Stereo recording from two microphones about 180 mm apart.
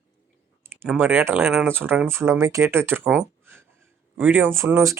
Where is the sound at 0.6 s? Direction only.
15° right (ahead or behind).